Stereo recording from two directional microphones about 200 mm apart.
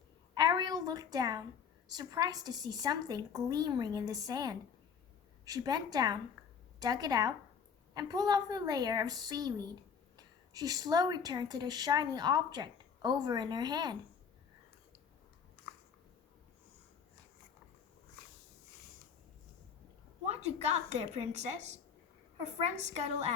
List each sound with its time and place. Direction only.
0.3 s a sound: 20° right (ahead or behind)
1.9 s a woman's voice: 20° right (ahead or behind)
20.2 s a woman's voice: 35° right (ahead or behind)